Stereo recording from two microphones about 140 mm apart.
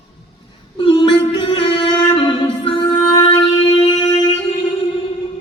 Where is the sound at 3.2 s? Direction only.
40° left (ahead or behind).